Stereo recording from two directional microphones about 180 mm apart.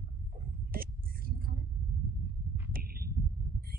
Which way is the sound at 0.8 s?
55° right (ahead or behind).